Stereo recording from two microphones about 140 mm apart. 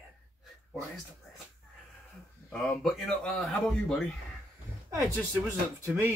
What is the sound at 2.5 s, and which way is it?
Speech, 5° left (ahead or behind).